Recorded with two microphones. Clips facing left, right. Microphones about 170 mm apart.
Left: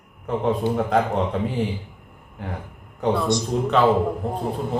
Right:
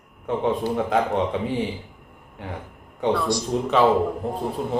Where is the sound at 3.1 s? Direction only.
20° left (ahead or behind).